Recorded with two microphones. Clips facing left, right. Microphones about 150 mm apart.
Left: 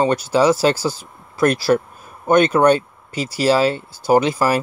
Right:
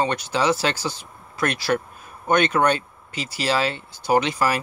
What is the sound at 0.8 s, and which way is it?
Speech, 5° left (ahead or behind).